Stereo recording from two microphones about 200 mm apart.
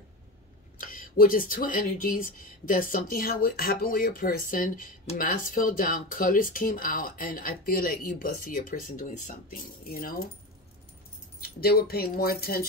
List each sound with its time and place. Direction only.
0.7 s speech: 45° left (ahead or behind)
11.4 s speech: 50° left (ahead or behind)